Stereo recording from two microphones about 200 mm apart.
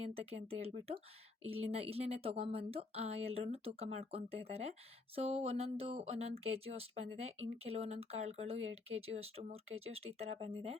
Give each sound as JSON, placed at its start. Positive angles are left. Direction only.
{"t": 0.0, "sound": "speech", "side_deg": -30}